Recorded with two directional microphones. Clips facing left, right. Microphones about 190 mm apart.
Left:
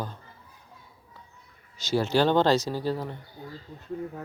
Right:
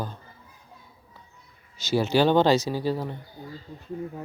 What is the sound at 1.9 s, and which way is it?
Speech, 10° right (ahead or behind).